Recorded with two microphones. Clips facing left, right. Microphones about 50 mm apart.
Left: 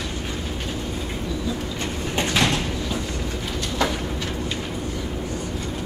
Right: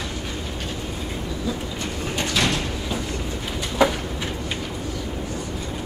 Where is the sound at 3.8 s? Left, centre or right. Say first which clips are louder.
Right 5 dB; centre.